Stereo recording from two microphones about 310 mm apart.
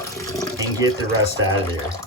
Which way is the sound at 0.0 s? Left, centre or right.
Centre.